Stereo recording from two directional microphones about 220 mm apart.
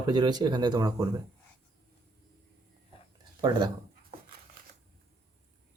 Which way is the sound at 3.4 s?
20° right (ahead or behind).